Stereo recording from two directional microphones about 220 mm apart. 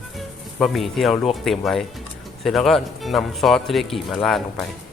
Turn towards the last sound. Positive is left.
turn(degrees=0)  # may be behind; listen again after turning